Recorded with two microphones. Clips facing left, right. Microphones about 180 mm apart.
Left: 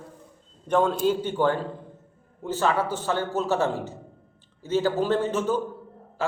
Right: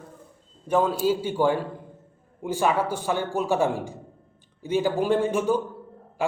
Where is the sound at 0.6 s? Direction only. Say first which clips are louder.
Even; 5° right (ahead or behind).